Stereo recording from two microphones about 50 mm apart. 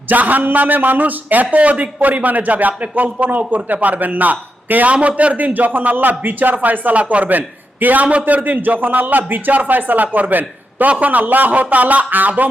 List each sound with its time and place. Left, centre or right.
0.1 s a man's voice: right